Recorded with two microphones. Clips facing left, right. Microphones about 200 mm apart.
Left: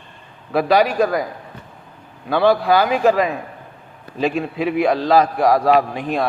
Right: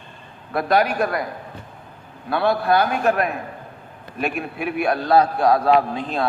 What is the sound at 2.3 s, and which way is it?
A man's voice, 90° left.